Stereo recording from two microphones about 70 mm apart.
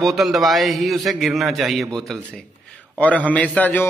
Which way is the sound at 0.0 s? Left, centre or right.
Centre.